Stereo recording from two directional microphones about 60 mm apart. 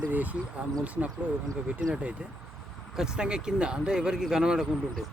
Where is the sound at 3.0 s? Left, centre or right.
Centre.